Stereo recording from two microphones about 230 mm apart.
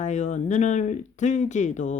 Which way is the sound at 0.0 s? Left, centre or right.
Left.